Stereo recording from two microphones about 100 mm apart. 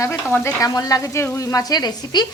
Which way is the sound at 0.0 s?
25° left (ahead or behind).